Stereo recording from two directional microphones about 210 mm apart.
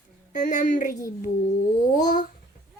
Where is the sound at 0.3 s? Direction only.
40° left (ahead or behind).